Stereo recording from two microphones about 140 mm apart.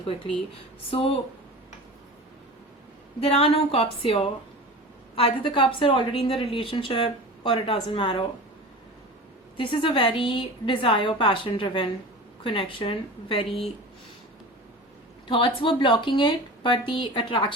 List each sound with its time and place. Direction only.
0.9 s a woman's voice: 40° left (ahead or behind)
3.2 s a woman's voice: 45° left (ahead or behind)
9.6 s a woman's voice: 35° left (ahead or behind)
15.3 s a woman's voice: 40° left (ahead or behind)